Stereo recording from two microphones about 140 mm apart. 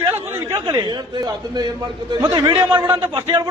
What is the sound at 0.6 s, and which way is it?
A man's voice, 35° right (ahead or behind).